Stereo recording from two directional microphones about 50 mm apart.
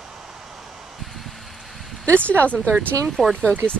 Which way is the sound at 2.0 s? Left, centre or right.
Left.